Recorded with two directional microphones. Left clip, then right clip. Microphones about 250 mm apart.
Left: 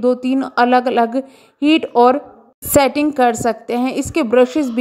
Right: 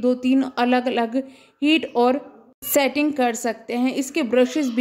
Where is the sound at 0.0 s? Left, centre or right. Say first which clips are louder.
Left 4 dB; centre.